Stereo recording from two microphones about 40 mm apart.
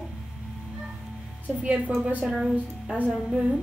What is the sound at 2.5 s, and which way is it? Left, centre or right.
Speech, right.